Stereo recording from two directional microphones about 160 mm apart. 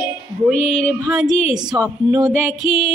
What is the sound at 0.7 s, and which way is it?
Female singing, centre (ahead or behind).